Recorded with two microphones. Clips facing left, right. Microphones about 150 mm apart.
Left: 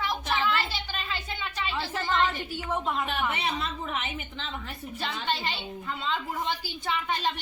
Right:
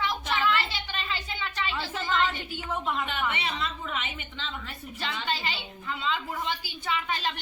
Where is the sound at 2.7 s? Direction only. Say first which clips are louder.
Left 1 dB; 15° left (ahead or behind).